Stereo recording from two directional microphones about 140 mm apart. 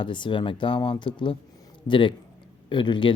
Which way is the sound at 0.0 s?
35° left (ahead or behind).